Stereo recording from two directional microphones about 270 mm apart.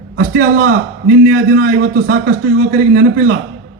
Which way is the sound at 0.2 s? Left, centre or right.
Right.